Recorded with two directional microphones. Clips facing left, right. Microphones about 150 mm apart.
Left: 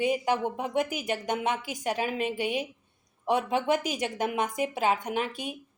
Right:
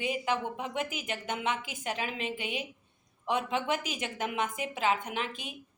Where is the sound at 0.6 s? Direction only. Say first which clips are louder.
Left 6 dB; 40° left (ahead or behind).